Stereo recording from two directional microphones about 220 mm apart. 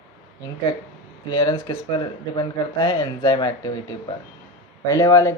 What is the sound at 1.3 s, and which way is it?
Speech, 20° left (ahead or behind).